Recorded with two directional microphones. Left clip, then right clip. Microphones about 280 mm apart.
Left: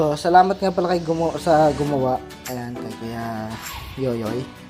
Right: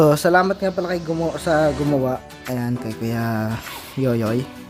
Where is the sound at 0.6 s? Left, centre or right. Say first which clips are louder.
Left 2 dB; centre; by 4.3 s right.